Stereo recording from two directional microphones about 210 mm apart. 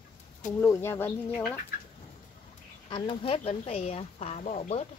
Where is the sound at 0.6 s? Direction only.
15° left (ahead or behind).